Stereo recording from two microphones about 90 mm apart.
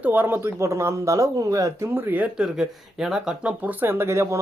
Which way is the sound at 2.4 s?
5° right (ahead or behind).